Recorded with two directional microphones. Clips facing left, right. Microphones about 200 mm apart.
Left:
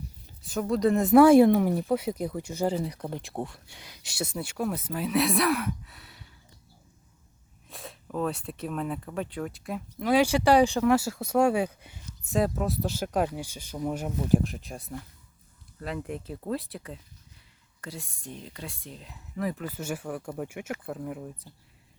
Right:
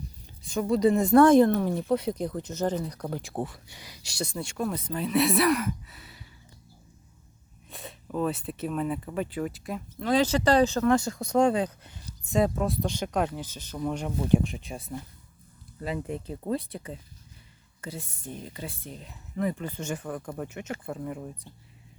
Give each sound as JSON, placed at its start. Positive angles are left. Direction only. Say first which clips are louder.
{"t": 0.4, "sound": "speech", "louder": "right 2 dB", "side_deg": 5}
{"t": 7.7, "sound": "speech", "louder": "right 1 dB", "side_deg": 0}
{"t": 10.0, "sound": "speech", "louder": "left 1 dB", "side_deg": 10}